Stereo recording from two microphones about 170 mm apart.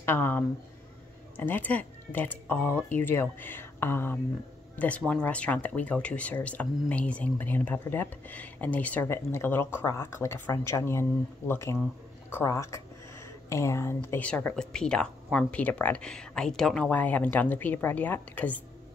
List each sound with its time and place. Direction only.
0.0 s speech: 10° left (ahead or behind)